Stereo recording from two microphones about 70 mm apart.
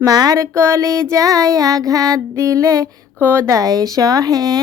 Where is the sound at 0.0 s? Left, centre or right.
Right.